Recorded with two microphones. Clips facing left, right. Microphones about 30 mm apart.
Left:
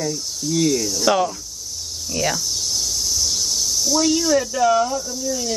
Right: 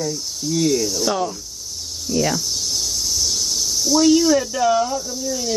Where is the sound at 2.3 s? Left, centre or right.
Centre.